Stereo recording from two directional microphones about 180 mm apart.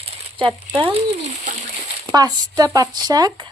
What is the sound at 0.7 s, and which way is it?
Speech, 30° right (ahead or behind).